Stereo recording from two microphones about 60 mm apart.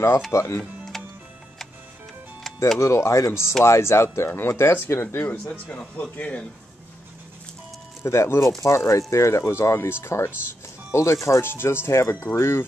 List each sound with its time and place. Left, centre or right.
0.3 s speech: left
0.9 s music: centre
2.8 s speech: left
4.3 s speech: left
5.5 s speech: left
8.0 s speech: left
11.4 s speech: left